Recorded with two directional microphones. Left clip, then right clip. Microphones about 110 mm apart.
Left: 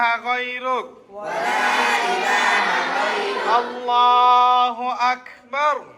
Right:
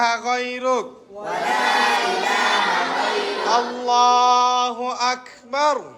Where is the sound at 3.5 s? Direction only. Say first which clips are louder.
Even; 35° right (ahead or behind).